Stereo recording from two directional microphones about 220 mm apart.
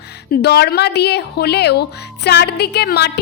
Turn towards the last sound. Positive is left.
turn(degrees=50)  # may be behind; listen again after turning